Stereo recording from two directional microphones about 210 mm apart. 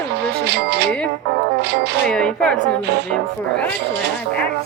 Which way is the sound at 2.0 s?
5° left (ahead or behind).